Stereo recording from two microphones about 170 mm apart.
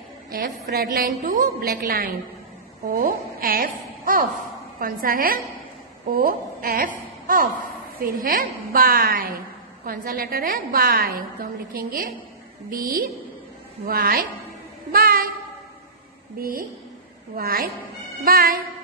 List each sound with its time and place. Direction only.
0.4 s a woman's voice: 60° right (ahead or behind)
14.9 s child singing: 60° right (ahead or behind)
16.3 s a woman's voice: 55° right (ahead or behind)